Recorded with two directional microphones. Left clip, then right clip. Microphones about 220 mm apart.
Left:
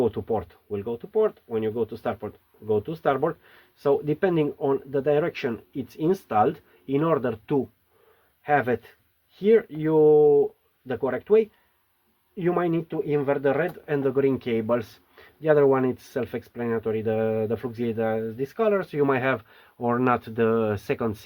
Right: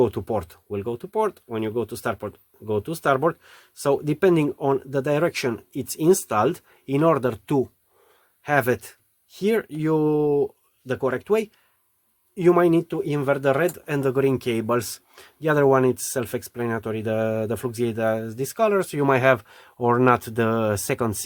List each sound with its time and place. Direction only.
0.0 s speech: 50° right (ahead or behind)